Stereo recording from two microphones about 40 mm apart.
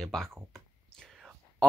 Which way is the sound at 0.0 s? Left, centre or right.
Centre.